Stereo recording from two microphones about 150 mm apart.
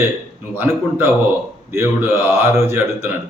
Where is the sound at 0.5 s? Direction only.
15° right (ahead or behind).